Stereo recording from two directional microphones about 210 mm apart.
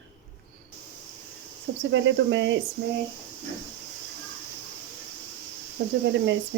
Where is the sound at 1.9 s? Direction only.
60° right (ahead or behind).